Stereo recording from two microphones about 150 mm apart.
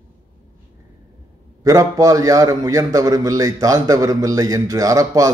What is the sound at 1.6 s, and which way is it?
A man's voice, 20° right (ahead or behind).